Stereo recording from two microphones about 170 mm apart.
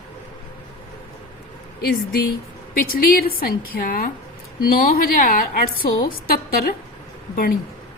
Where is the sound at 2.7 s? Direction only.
60° left (ahead or behind).